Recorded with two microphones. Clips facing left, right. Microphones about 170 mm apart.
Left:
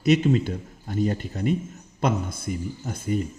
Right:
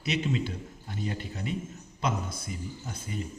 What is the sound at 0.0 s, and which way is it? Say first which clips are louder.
A man's voice: left 10 dB; 50° left (ahead or behind).